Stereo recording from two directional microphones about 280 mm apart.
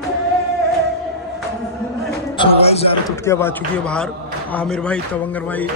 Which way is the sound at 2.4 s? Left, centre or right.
Left.